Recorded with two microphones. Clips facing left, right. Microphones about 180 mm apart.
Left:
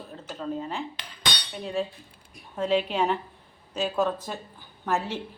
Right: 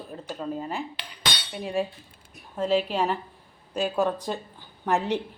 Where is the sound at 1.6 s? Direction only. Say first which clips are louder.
Right 2 dB; 10° right (ahead or behind).